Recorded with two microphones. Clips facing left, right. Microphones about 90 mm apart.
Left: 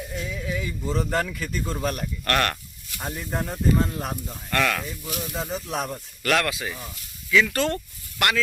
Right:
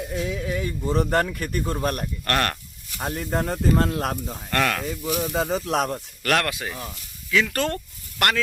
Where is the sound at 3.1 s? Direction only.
60° right (ahead or behind); by 4.1 s 75° right (ahead or behind).